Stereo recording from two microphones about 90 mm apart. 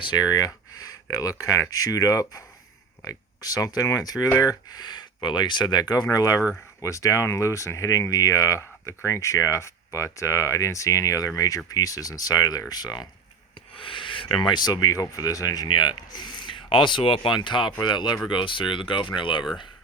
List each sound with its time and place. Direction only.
0.0 s speech: 50° left (ahead or behind); by 4.5 s 35° left (ahead or behind)
4.7 s speech: 50° left (ahead or behind)
13.7 s speech: 75° left (ahead or behind)